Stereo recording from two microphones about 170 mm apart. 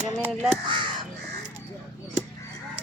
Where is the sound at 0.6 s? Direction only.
30° right (ahead or behind).